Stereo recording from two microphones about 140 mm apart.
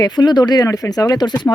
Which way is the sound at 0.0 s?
30° left (ahead or behind).